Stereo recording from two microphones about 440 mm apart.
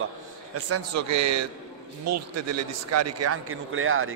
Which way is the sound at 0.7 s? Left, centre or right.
Right.